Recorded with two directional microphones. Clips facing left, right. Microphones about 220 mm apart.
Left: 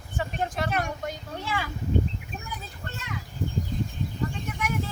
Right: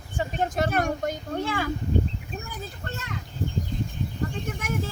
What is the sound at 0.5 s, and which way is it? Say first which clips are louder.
Speech: right 4 dB; 45° right (ahead or behind).